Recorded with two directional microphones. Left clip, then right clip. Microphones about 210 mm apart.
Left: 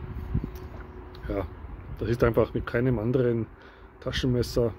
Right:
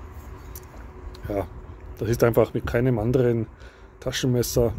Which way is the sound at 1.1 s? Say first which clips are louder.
Right 4 dB; 10° right (ahead or behind).